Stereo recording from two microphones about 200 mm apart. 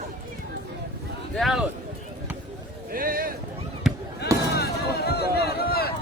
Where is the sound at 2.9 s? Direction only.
45° right (ahead or behind).